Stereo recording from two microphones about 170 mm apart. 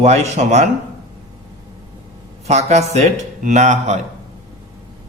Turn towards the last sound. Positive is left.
turn(degrees=-45)  # may be behind; listen again after turning